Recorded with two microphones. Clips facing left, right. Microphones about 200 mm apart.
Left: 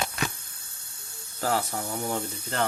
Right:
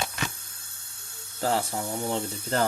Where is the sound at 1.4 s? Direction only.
30° right (ahead or behind).